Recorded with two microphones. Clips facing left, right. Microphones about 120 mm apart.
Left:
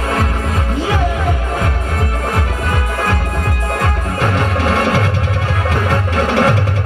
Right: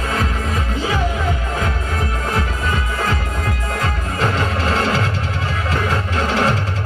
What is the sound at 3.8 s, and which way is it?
Music, 55° left (ahead or behind).